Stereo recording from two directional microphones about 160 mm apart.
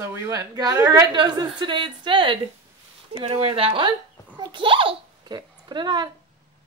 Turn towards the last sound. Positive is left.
turn(degrees=-25)  # may be behind; listen again after turning